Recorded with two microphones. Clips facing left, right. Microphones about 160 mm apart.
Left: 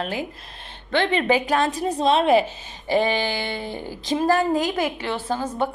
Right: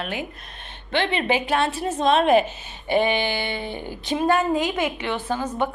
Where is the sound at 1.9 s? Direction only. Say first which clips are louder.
Even; 30° left (ahead or behind).